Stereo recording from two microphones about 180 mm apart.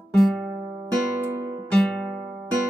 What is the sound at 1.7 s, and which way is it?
Music, 5° left (ahead or behind).